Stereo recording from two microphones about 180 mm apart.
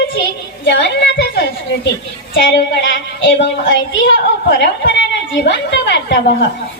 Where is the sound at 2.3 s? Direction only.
85° left.